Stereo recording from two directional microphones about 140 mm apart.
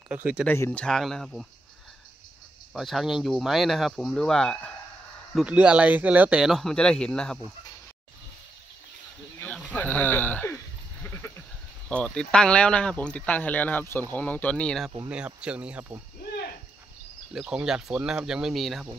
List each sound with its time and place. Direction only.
0.1 s speech: 10° right (ahead or behind)
0.5 s speech: 10° left (ahead or behind)
2.7 s speech: centre (ahead or behind)
5.3 s speech: 10° right (ahead or behind)
9.4 s sheep: 10° left (ahead or behind)
11.9 s speech: 5° left (ahead or behind)
15.0 s speech: 10° right (ahead or behind)
17.3 s speech: 5° right (ahead or behind)